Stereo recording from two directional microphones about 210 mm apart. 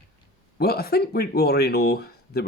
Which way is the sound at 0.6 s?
50° left (ahead or behind).